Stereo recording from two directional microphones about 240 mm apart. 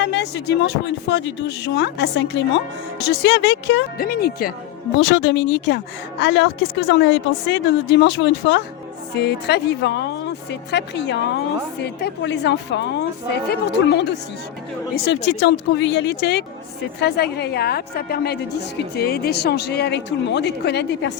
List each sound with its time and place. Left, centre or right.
0.0 s a woman's voice: left